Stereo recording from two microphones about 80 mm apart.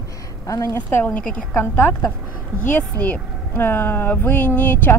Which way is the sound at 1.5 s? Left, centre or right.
Left.